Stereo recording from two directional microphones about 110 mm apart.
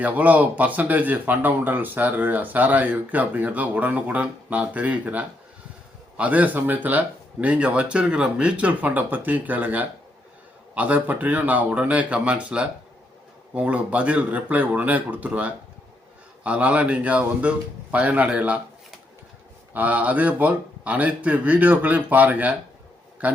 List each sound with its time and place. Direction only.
0.0 s speech: 15° right (ahead or behind)
19.7 s a man's voice: 15° right (ahead or behind)